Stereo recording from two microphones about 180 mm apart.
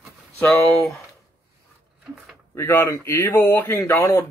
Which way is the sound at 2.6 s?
10° left (ahead or behind).